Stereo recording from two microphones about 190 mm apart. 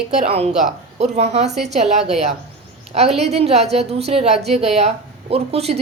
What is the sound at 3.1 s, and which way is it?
A woman's voice, 35° right (ahead or behind).